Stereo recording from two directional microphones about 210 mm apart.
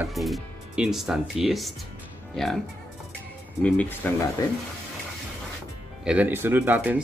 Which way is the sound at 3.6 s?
5° left (ahead or behind).